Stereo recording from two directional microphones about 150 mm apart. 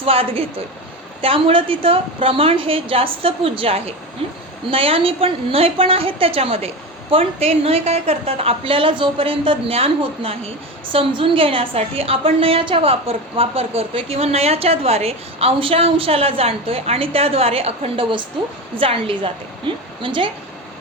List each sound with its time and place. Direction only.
0.0 s a woman's voice: 40° right (ahead or behind)